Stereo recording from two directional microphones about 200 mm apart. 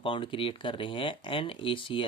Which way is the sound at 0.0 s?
25° left (ahead or behind).